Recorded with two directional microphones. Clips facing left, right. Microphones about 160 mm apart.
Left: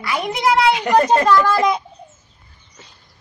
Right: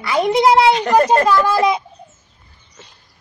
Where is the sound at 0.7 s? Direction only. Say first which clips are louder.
Right 2 dB; 10° left (ahead or behind).